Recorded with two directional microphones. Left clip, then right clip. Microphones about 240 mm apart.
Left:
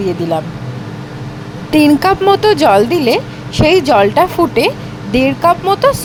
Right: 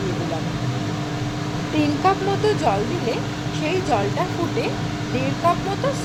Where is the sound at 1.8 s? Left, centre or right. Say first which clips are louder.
Left 10 dB; left.